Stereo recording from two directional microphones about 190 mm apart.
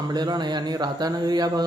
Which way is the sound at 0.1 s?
20° right (ahead or behind).